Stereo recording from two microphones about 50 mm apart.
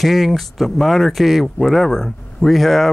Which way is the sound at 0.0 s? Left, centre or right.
Centre.